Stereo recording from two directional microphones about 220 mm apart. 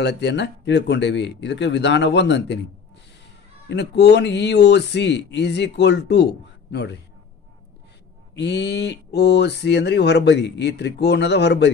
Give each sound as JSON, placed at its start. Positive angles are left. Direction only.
{"t": 0.0, "sound": "speech", "side_deg": 50}
{"t": 3.6, "sound": "speech", "side_deg": 50}
{"t": 8.4, "sound": "speech", "side_deg": 50}